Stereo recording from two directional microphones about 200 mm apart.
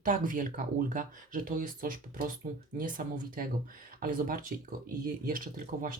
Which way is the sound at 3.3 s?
45° right (ahead or behind).